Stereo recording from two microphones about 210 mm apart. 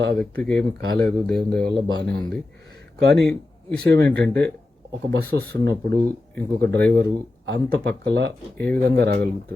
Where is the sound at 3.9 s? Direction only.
55° right (ahead or behind).